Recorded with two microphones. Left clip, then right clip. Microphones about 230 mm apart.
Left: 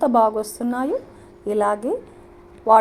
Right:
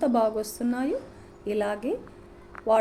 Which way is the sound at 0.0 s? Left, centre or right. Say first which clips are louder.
Left 7 dB; centre.